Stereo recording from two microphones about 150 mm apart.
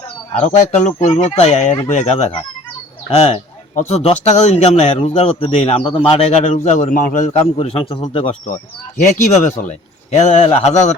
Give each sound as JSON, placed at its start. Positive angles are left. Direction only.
{"t": 0.4, "sound": "a man's voice", "side_deg": 50}
{"t": 7.3, "sound": "a man's voice", "side_deg": 40}
{"t": 9.0, "sound": "speech", "side_deg": 55}